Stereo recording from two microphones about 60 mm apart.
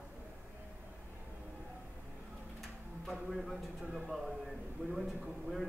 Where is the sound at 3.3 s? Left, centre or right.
Centre.